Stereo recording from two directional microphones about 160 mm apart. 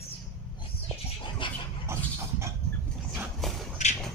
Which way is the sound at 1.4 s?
30° left (ahead or behind).